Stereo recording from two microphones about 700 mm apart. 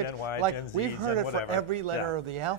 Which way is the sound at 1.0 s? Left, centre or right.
Left.